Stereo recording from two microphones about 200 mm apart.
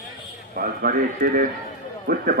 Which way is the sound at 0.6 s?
45° right (ahead or behind).